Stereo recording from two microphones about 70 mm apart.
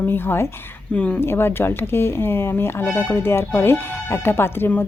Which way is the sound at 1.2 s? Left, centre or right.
Left.